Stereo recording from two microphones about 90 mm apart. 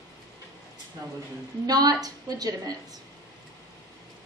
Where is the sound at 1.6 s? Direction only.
45° right (ahead or behind).